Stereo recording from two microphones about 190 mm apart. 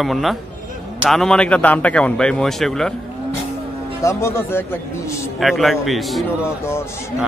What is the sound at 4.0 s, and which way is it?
Speech, 15° left (ahead or behind).